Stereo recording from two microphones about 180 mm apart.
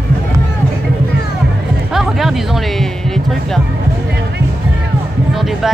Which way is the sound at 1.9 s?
Centre (ahead or behind).